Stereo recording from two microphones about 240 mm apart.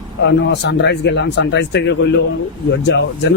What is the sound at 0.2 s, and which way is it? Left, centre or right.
Speech, left.